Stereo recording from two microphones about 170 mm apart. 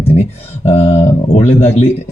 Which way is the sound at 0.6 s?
40° left (ahead or behind).